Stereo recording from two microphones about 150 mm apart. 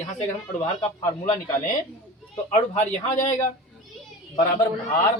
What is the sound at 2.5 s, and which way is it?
Speech, 50° left (ahead or behind).